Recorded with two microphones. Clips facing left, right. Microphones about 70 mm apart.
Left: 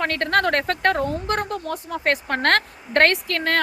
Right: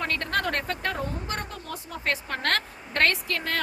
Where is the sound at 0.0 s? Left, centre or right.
Left.